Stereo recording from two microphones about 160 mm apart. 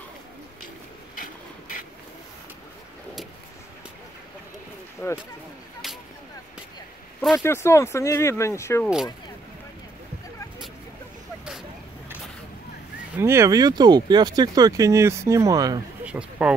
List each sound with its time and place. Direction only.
5.0 s speech: 15° left (ahead or behind)
7.3 s speech: 15° left (ahead or behind)
8.8 s speech: centre (ahead or behind)
13.2 s speech: 15° right (ahead or behind)
16.1 s speech: 5° right (ahead or behind)